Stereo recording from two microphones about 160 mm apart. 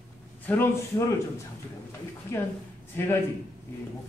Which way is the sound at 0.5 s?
15° left (ahead or behind).